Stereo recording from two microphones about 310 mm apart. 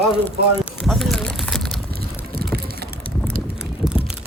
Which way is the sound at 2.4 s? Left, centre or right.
Right.